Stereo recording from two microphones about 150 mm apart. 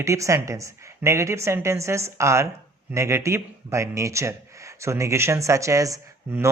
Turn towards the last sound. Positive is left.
turn(degrees=-20)  # may be behind; listen again after turning